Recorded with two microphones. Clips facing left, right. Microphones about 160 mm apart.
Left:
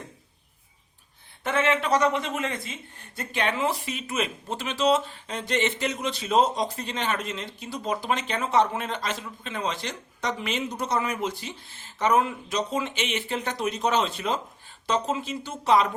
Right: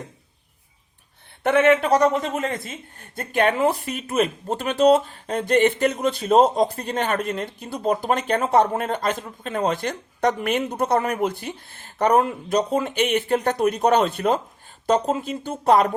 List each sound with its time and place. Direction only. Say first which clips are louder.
1.5 s speech: right 7 dB; 60° right (ahead or behind)